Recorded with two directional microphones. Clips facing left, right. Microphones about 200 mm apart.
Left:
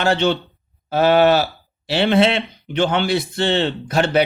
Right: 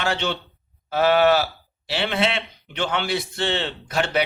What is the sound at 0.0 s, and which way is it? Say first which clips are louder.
Speech: left 7 dB; 35° left (ahead or behind).